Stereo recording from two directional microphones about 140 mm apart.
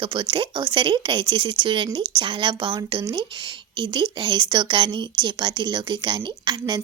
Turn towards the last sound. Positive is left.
turn(degrees=-30)  # may be behind; listen again after turning